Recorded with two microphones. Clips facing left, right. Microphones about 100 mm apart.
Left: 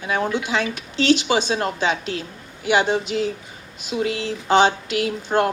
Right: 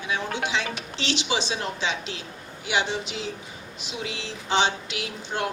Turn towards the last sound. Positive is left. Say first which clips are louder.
# left 9 dB
turn(degrees=50)  # may be behind; listen again after turning